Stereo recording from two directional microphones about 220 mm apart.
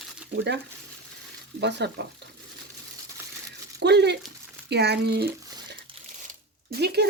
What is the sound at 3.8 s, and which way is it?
Speech, 50° right (ahead or behind).